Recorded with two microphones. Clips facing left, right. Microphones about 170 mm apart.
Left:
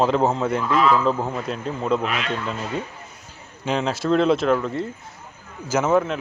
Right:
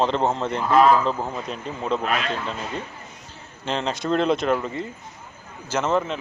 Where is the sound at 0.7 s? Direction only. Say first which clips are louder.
Right 4 dB; 45° right (ahead or behind).